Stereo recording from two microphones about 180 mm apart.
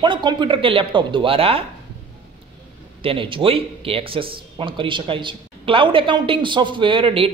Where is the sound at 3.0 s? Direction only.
30° right (ahead or behind).